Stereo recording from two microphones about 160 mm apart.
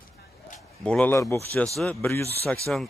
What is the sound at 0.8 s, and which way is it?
Speech, 5° left (ahead or behind).